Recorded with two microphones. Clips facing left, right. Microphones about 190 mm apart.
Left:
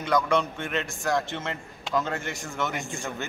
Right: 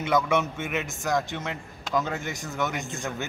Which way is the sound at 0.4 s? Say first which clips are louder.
Even; 20° right (ahead or behind).